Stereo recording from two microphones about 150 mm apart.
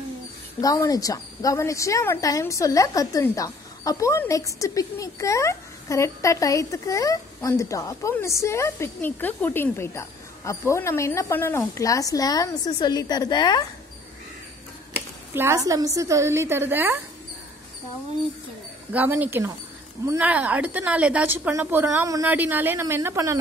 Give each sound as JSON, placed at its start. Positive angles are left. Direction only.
{"t": 0.6, "sound": "a woman's voice", "side_deg": 25}
{"t": 15.3, "sound": "a woman's voice", "side_deg": -20}
{"t": 18.9, "sound": "a woman's voice", "side_deg": -10}